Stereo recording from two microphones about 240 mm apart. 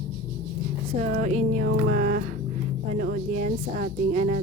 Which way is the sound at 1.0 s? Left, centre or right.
Right.